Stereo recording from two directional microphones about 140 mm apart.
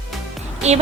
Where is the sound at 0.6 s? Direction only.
50° right (ahead or behind).